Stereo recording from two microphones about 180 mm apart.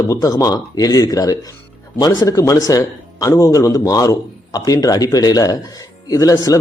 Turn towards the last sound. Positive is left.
turn(degrees=20)  # may be behind; listen again after turning